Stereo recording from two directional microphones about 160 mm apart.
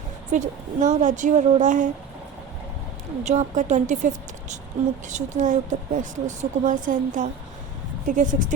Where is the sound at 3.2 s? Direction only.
45° right (ahead or behind).